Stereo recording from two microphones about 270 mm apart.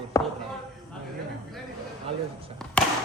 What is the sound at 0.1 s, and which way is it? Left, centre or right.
Basketball bounce, centre.